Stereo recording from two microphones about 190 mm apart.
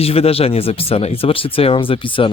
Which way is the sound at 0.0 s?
30° left (ahead or behind).